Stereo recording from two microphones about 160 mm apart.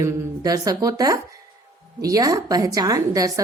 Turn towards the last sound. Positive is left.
turn(degrees=-20)  # may be behind; listen again after turning